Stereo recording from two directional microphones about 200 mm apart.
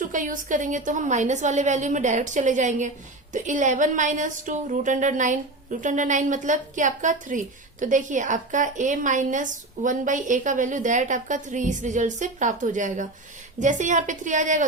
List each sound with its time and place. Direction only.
0.0 s speech: 40° right (ahead or behind)